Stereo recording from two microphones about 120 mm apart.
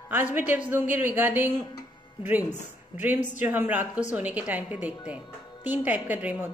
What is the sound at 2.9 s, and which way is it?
Speech, 15° right (ahead or behind).